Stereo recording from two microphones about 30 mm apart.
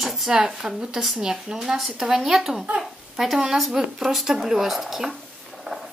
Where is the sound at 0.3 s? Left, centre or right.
Right.